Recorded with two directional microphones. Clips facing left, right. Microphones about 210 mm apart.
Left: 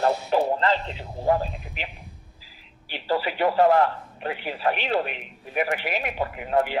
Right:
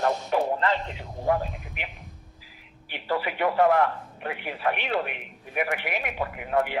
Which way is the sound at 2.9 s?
30° left (ahead or behind).